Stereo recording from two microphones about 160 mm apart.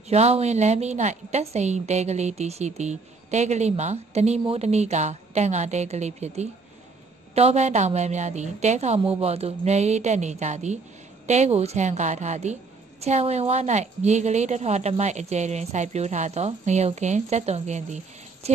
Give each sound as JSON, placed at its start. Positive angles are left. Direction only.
{"t": 0.1, "sound": "a woman's voice", "side_deg": -40}